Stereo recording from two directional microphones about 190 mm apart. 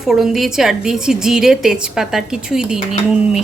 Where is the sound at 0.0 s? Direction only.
Centre (ahead or behind).